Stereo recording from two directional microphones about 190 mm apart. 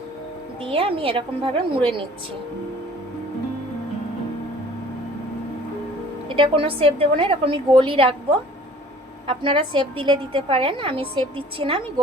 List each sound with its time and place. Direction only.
0.6 s a woman's voice: 30° right (ahead or behind)
6.2 s a woman's voice: 30° right (ahead or behind)